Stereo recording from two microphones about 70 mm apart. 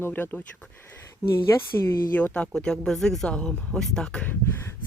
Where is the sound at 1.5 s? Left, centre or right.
Left.